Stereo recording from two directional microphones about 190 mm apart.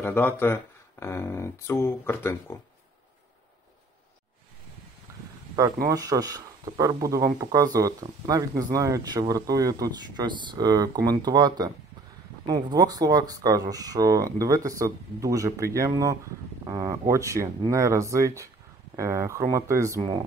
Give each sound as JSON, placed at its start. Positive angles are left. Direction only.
{"t": 0.0, "sound": "speech", "side_deg": 10}
{"t": 5.9, "sound": "speech", "side_deg": -20}